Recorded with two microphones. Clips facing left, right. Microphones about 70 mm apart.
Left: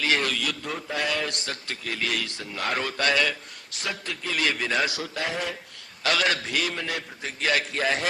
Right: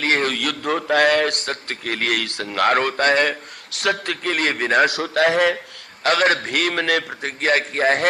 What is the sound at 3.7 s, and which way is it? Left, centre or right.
A man's voice, right.